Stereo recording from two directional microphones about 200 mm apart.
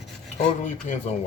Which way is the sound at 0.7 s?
40° left (ahead or behind).